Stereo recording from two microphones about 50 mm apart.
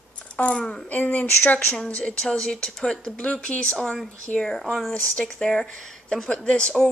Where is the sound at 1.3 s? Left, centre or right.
Left.